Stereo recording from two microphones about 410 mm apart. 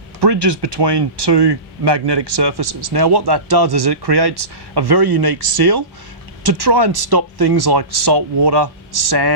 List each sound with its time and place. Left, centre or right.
0.2 s speech: right